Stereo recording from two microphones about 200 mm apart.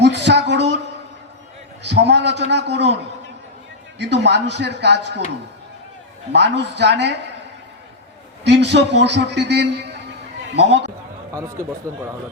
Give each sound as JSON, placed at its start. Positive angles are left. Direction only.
{"t": 0.0, "sound": "a sound", "side_deg": -60}
{"t": 1.8, "sound": "a man's voice", "side_deg": -60}
{"t": 6.3, "sound": "a man's voice", "side_deg": -60}
{"t": 8.4, "sound": "a man's voice", "side_deg": -60}
{"t": 11.3, "sound": "speech", "side_deg": -15}